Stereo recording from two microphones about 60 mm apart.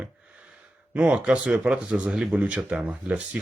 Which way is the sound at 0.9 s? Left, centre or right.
Centre.